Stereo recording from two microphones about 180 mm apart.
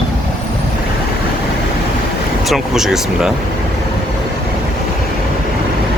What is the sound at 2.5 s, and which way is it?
Speech, centre (ahead or behind).